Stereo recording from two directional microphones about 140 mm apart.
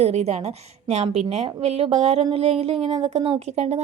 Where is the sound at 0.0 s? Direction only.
50° right (ahead or behind).